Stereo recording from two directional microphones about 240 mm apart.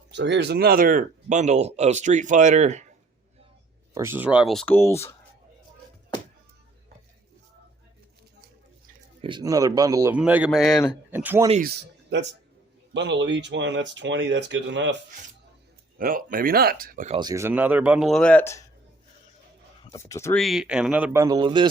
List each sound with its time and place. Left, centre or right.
0.1 s speech: right
3.9 s speech: centre
9.2 s a man's voice: centre
12.9 s speech: right
16.0 s speech: right
17.2 s a man's voice: centre
19.9 s speech: centre
20.4 s speech: centre